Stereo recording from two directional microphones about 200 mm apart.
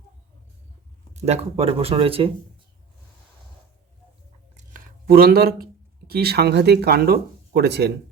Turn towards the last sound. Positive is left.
turn(degrees=-55)  # may be behind; listen again after turning